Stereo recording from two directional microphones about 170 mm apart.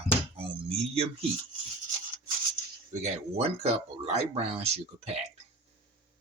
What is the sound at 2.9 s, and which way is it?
Speech, 40° right (ahead or behind).